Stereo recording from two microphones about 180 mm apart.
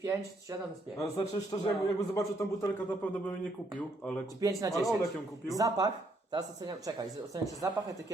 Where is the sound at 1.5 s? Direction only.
20° left (ahead or behind).